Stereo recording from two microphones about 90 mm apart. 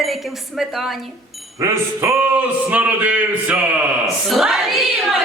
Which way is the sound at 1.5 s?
35° right (ahead or behind).